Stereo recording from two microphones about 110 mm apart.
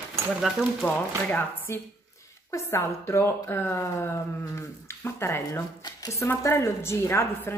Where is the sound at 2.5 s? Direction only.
25° left (ahead or behind).